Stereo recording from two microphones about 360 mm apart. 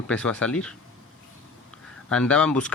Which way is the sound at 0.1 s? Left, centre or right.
Centre.